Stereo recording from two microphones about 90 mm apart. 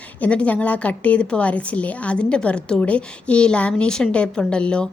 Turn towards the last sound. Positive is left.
turn(degrees=10)  # may be behind; listen again after turning